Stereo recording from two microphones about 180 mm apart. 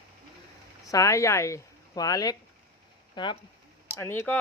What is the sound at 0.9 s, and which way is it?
Speech, 15° left (ahead or behind).